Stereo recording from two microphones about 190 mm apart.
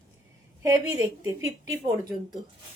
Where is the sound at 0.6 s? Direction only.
15° right (ahead or behind).